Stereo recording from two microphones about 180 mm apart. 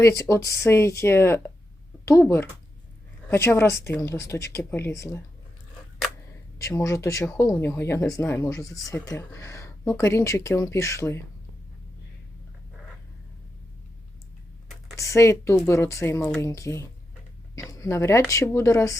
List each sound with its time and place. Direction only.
0.0 s speech: 15° left (ahead or behind)
6.6 s speech: 15° left (ahead or behind)
14.9 s speech: 15° left (ahead or behind)